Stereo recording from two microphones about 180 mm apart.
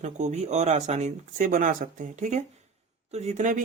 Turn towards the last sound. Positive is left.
turn(degrees=-45)  # may be behind; listen again after turning